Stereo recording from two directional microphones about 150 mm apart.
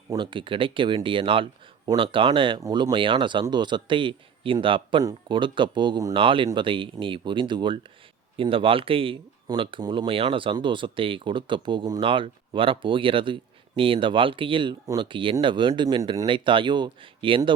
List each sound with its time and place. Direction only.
0.1 s speech: 30° right (ahead or behind)
2.6 s speech: 25° right (ahead or behind)